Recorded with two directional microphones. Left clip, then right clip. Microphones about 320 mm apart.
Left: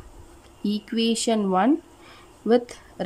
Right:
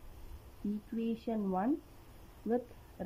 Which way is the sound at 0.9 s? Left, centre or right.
Centre.